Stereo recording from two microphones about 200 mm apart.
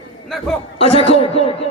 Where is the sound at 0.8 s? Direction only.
30° left (ahead or behind).